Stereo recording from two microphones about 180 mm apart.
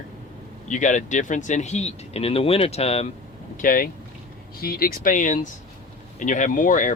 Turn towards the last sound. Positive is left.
turn(degrees=45)  # may be behind; listen again after turning